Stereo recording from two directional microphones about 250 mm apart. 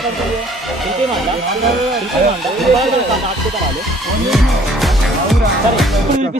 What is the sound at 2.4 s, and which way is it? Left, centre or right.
Speech, centre.